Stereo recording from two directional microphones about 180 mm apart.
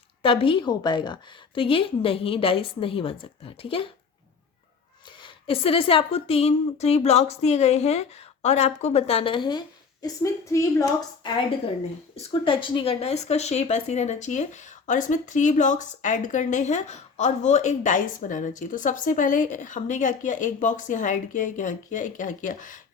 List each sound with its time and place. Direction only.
0.2 s a woman's voice: 30° left (ahead or behind)
5.2 s a woman's voice: 30° left (ahead or behind)
12.1 s a woman's voice: 30° left (ahead or behind)